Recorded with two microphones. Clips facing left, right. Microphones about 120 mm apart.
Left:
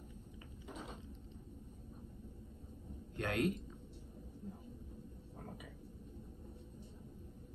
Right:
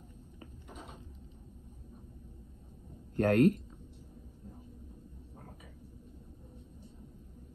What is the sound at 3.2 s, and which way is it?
Speech, 50° right (ahead or behind).